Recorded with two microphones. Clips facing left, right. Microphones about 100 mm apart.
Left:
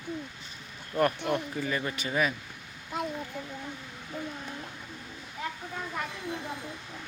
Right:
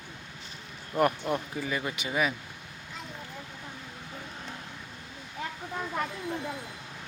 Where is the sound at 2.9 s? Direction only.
50° left (ahead or behind).